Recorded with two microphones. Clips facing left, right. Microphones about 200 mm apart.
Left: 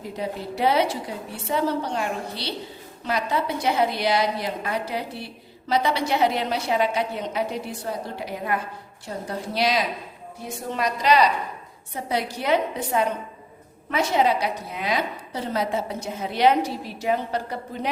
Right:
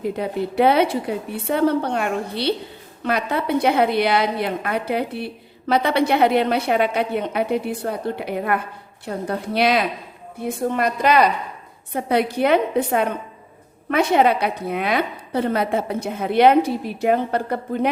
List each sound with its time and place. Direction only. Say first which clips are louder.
0.0 s a woman's voice: right 7 dB; 60° right (ahead or behind)